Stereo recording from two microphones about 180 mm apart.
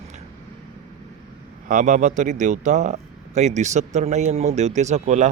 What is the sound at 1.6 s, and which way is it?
A man's voice, 45° right (ahead or behind).